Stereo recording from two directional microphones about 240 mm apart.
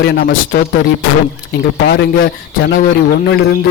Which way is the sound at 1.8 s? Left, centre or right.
Left.